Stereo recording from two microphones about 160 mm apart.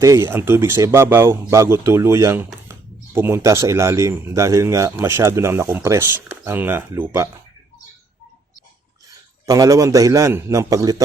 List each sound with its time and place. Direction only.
0.0 s speech: 20° right (ahead or behind)
9.5 s a man's voice: 20° right (ahead or behind)